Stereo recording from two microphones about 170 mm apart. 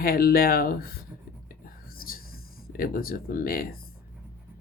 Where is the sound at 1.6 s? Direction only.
60° left (ahead or behind).